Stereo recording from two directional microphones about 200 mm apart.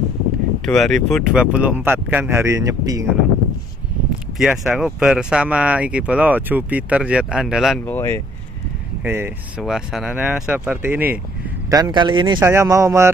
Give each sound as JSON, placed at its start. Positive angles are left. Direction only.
{"t": 0.7, "sound": "speech", "side_deg": 0}
{"t": 4.4, "sound": "speech", "side_deg": -5}
{"t": 7.8, "sound": "speech", "side_deg": 10}
{"t": 9.0, "sound": "speech", "side_deg": -10}
{"t": 11.7, "sound": "a man's voice", "side_deg": -20}
{"t": 12.4, "sound": "speech", "side_deg": -10}